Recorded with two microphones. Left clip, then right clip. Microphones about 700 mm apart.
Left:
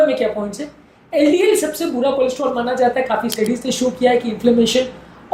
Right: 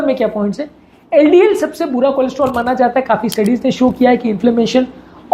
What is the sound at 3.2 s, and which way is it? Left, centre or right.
Speech, centre.